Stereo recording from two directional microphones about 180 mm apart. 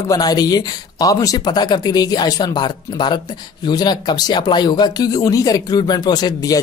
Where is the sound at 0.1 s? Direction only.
20° left (ahead or behind).